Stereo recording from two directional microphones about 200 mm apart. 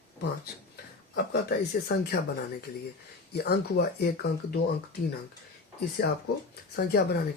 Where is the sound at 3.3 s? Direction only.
50° left (ahead or behind).